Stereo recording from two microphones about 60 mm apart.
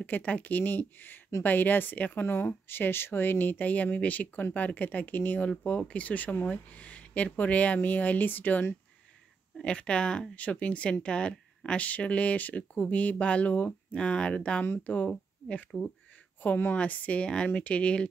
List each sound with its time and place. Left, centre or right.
0.0 s speech: left
9.6 s speech: centre
14.6 s speech: left
15.0 s speech: centre
16.3 s speech: left